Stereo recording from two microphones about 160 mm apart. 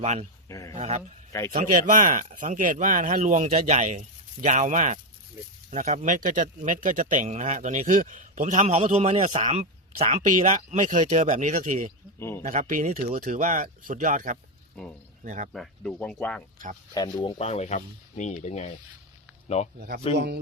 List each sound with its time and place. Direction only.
0.0 s speech: 45° right (ahead or behind)
0.4 s speech: 20° left (ahead or behind)
0.8 s speech: 45° right (ahead or behind)
1.5 s speech: 55° right (ahead or behind)
15.5 s speech: centre (ahead or behind)
16.9 s speech: 25° left (ahead or behind)
17.3 s speech: 40° left (ahead or behind)
20.1 s speech: 90° right